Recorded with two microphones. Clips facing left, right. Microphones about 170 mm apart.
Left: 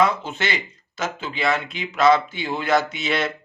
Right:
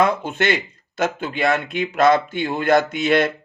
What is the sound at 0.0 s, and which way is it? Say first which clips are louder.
A man's voice: right 2 dB; 55° right (ahead or behind).